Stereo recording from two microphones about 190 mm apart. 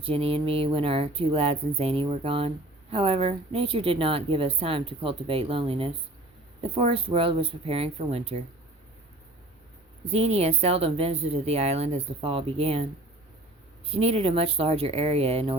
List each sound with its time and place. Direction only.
0.0 s a woman's voice: 30° right (ahead or behind)
10.1 s speech: 35° right (ahead or behind)
13.9 s speech: 30° right (ahead or behind)